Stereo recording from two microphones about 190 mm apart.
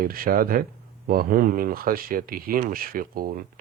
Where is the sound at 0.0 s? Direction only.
50° right (ahead or behind).